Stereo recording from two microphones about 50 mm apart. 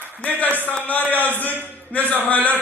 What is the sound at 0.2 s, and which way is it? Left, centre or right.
A man's voice, left.